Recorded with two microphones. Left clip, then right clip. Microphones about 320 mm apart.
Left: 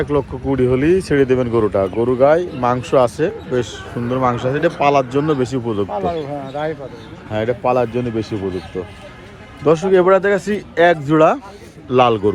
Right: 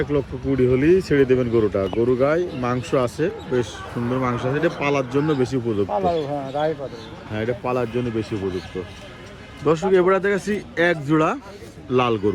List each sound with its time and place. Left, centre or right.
0.0 s speech: centre
5.9 s speech: left
7.3 s speech: centre
9.6 s speech: centre